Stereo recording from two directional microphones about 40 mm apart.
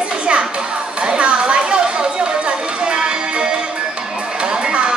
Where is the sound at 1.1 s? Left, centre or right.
Right.